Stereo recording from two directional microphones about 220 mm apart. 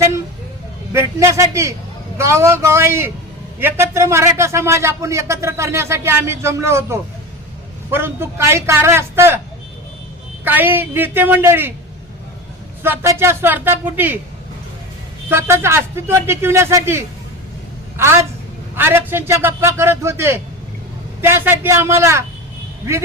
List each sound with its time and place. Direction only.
0.9 s a man's voice: 15° right (ahead or behind)
10.4 s a man's voice: 10° right (ahead or behind)
12.8 s a man's voice: 10° right (ahead or behind)
15.3 s a man's voice: 10° right (ahead or behind)